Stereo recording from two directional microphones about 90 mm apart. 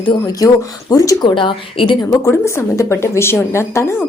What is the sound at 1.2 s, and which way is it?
Speech, 65° left (ahead or behind).